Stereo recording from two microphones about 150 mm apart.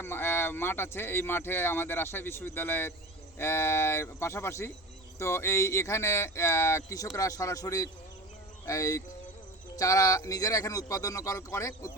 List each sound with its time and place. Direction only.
0.0 s speech: 15° left (ahead or behind)